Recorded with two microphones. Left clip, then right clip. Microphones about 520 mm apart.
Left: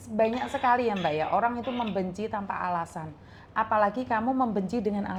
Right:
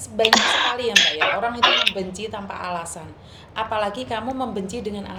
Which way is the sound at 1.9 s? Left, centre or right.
Left.